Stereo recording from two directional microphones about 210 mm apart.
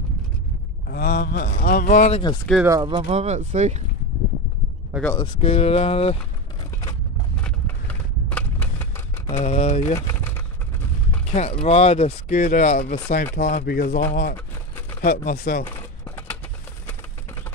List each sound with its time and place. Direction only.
0.8 s speech: 45° left (ahead or behind)
2.6 s speech: 20° right (ahead or behind)
3.1 s speech: 30° right (ahead or behind)
5.0 s speech: 20° left (ahead or behind)
7.4 s a sound: 5° left (ahead or behind)
9.3 s speech: 30° left (ahead or behind)
9.9 s a sound: 10° left (ahead or behind)
11.6 s speech: 30° left (ahead or behind)